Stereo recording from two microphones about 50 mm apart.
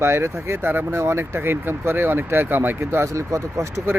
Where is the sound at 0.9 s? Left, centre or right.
Right.